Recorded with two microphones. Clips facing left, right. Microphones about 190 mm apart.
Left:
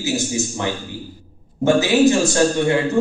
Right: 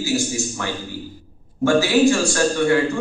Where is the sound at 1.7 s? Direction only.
20° left (ahead or behind).